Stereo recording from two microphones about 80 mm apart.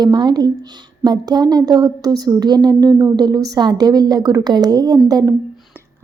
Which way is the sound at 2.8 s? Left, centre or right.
Right.